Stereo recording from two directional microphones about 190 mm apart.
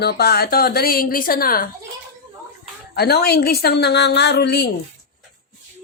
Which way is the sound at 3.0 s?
55° left (ahead or behind).